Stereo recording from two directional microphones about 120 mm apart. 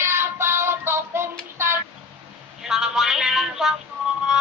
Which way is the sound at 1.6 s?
25° right (ahead or behind).